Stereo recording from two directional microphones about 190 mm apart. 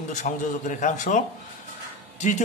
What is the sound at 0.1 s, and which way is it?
Speech, 40° left (ahead or behind).